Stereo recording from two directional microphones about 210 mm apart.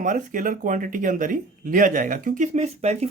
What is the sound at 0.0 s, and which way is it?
Speech, 40° right (ahead or behind).